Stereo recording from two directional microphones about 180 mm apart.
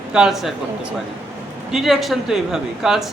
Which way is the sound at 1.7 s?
Centre (ahead or behind).